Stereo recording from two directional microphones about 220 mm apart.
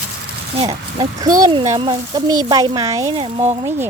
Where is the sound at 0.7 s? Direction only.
20° right (ahead or behind).